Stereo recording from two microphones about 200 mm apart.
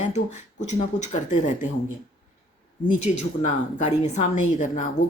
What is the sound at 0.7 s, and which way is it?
Speech, 35° left (ahead or behind).